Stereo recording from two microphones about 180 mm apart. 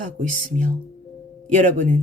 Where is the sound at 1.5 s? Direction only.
45° right (ahead or behind).